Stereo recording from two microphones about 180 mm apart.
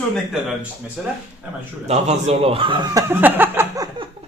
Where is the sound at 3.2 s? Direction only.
10° right (ahead or behind).